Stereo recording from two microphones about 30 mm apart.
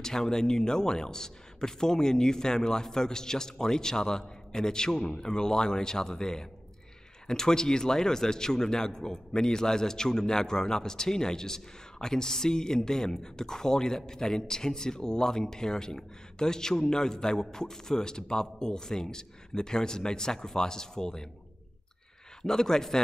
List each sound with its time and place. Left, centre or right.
0.0 s speech: centre
22.4 s speech: centre